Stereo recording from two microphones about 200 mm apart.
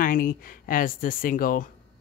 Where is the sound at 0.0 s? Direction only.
40° left (ahead or behind).